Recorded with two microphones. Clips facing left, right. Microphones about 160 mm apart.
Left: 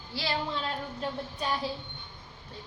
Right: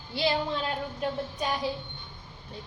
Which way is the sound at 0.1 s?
20° right (ahead or behind).